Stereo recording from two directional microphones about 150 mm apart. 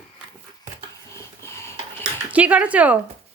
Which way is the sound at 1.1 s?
20° left (ahead or behind).